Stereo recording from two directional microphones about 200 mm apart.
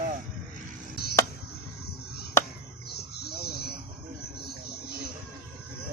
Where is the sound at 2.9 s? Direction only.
55° left (ahead or behind).